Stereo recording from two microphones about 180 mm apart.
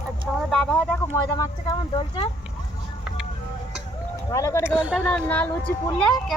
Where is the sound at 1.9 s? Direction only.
30° left (ahead or behind).